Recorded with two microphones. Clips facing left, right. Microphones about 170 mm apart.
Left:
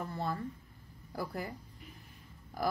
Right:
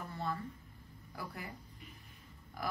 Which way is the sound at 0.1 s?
35° left (ahead or behind).